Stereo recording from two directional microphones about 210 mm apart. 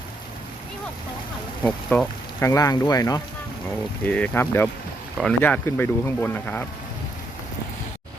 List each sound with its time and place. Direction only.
1.6 s speech: 5° left (ahead or behind)
4.0 s speech: 5° left (ahead or behind)